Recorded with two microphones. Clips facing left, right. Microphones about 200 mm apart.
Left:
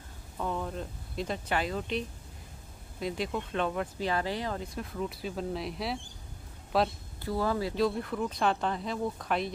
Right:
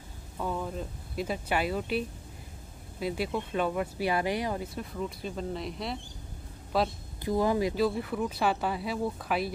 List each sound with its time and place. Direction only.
0.4 s speech: 5° right (ahead or behind)
4.7 s speech: centre (ahead or behind)
7.2 s speech: 15° right (ahead or behind)
7.7 s speech: 5° right (ahead or behind)